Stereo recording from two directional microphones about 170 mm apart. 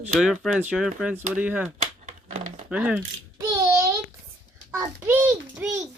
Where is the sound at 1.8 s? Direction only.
45° right (ahead or behind).